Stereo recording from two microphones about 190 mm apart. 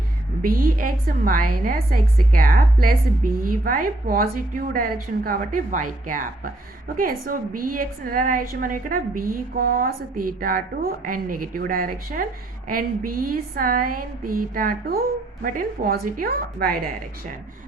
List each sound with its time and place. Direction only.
0.4 s a woman's voice: 50° right (ahead or behind)